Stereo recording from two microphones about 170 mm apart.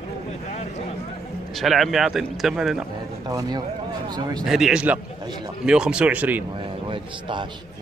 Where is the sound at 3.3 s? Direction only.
25° right (ahead or behind).